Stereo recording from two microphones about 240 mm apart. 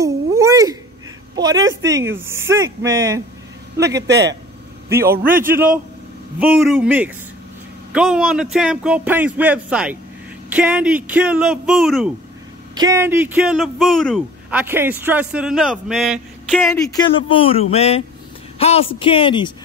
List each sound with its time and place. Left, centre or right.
0.0 s cat: centre
1.3 s a woman's voice: centre
1.6 s a woman's voice: right
1.9 s speech: centre
4.1 s a woman's voice: right
4.8 s a man's voice: centre
6.4 s a man's voice: centre
12.7 s a man's voice: centre; by 19.5 s left